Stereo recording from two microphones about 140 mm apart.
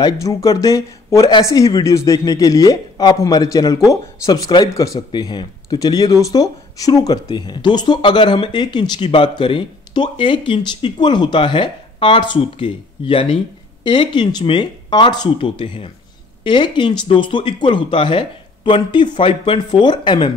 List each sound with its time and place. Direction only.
0.0 s speech: 25° left (ahead or behind)